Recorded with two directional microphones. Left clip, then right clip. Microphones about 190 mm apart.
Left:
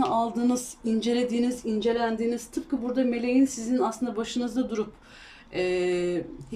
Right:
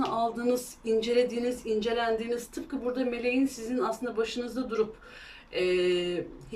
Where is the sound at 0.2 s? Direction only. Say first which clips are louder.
Left 1 dB; 35° left (ahead or behind).